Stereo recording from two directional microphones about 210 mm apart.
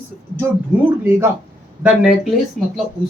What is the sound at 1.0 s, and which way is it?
A woman's voice, 10° right (ahead or behind).